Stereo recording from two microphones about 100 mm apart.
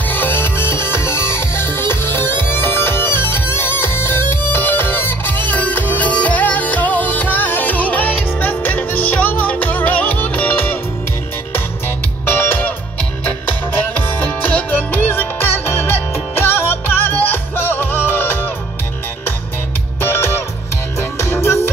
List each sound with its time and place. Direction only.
0.1 s music: 20° left (ahead or behind)
12.3 s music: 20° left (ahead or behind)
20.0 s music: 25° left (ahead or behind)